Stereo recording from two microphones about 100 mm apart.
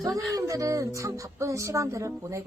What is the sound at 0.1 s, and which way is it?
Speech, 5° left (ahead or behind).